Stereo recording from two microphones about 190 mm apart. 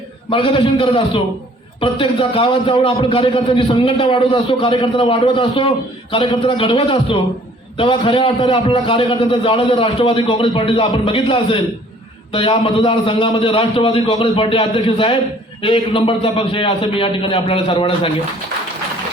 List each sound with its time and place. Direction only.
0.3 s a man's voice: 25° left (ahead or behind)